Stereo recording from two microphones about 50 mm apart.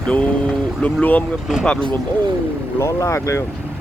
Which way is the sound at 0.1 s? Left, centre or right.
Left.